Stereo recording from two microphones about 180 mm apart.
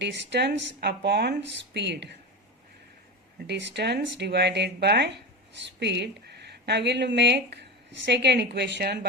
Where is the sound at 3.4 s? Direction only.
75° right (ahead or behind).